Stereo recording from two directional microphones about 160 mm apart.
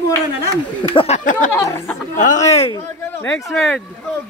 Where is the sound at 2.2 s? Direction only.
45° left (ahead or behind).